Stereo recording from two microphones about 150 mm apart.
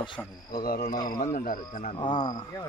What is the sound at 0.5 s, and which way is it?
Speech, 75° left (ahead or behind).